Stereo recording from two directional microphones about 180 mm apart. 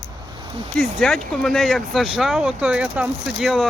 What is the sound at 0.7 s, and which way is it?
Speech, 5° left (ahead or behind).